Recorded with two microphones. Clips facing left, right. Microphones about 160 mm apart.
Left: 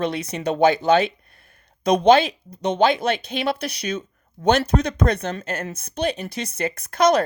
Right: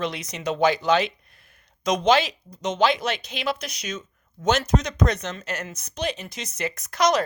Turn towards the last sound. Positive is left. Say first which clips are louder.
# left 4 dB
turn(degrees=55)  # may be behind; listen again after turning